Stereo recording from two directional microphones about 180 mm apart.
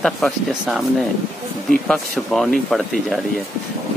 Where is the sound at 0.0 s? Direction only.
Centre (ahead or behind).